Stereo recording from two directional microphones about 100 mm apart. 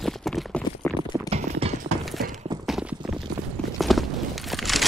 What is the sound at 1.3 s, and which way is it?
Clip-clop, 90° right.